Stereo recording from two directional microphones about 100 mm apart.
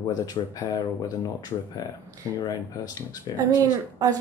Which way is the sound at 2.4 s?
40° left (ahead or behind).